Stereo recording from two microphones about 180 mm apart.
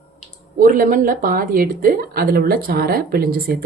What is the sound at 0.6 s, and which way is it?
Speech, 50° right (ahead or behind).